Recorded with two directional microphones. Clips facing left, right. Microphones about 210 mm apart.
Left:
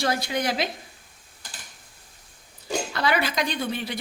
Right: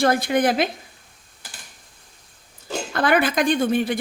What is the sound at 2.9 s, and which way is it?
Speech, 50° right (ahead or behind).